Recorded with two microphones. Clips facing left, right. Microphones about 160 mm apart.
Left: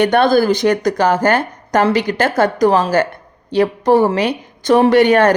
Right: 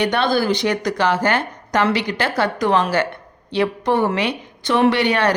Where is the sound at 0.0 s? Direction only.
50° left (ahead or behind).